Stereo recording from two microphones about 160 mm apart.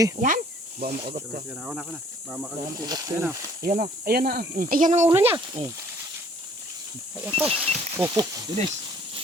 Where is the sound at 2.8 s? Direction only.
25° right (ahead or behind).